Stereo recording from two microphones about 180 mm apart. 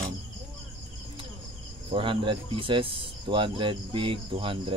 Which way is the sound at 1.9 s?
30° right (ahead or behind).